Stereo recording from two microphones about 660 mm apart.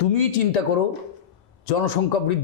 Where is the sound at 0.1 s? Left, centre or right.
Left.